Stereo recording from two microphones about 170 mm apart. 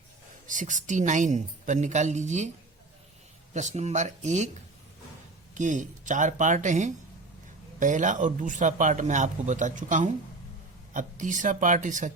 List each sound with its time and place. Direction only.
0.4 s a man's voice: 50° right (ahead or behind)
3.5 s a man's voice: 45° right (ahead or behind)
5.5 s a man's voice: 50° right (ahead or behind)